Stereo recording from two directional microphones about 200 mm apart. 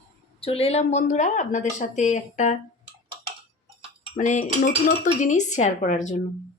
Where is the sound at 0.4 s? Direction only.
30° left (ahead or behind).